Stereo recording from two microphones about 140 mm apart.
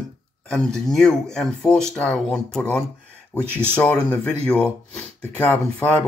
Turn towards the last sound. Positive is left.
turn(degrees=10)  # may be behind; listen again after turning